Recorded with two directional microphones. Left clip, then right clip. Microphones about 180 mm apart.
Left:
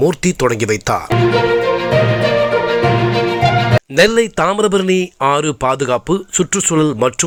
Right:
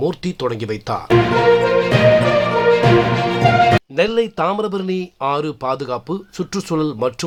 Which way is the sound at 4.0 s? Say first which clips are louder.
Left 5 dB; 20° left (ahead or behind).